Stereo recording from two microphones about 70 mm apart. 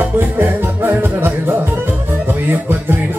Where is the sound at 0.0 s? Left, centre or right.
Right.